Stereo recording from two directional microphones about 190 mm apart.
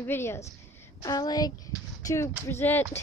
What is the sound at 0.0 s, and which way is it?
A woman's voice, 10° left (ahead or behind).